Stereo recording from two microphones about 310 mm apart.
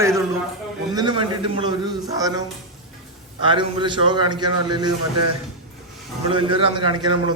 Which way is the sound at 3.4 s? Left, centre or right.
Centre.